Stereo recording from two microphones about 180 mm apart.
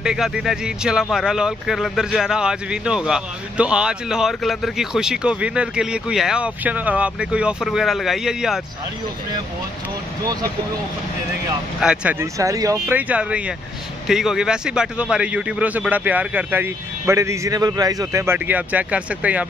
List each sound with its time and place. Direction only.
0.0 s speech: 5° right (ahead or behind)
11.8 s a man's voice: 5° right (ahead or behind)